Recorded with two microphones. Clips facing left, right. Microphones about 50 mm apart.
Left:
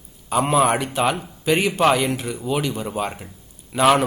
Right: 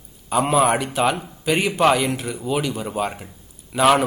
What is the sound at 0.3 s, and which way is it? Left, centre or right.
A man's voice, centre.